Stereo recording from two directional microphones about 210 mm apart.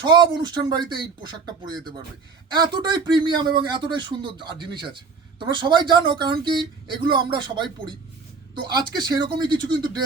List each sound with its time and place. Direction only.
0.0 s speech: 20° right (ahead or behind)